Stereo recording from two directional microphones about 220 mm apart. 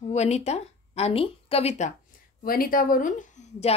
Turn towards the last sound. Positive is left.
turn(degrees=30)  # may be behind; listen again after turning